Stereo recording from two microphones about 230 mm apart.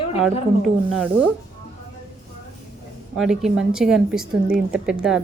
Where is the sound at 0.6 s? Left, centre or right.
Centre.